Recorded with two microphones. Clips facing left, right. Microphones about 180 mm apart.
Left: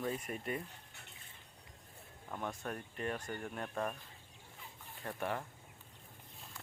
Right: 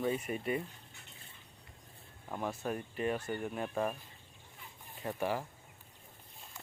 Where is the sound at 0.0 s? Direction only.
5° right (ahead or behind).